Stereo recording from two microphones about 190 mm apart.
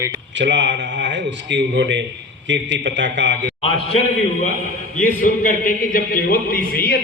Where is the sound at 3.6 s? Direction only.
30° left (ahead or behind).